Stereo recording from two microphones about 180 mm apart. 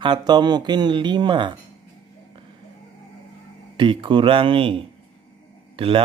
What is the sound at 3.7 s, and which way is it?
Speech, 30° right (ahead or behind).